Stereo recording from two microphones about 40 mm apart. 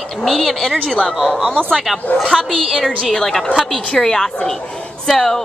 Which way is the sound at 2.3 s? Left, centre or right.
Centre.